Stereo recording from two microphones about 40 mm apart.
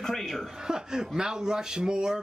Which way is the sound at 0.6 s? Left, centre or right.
Centre.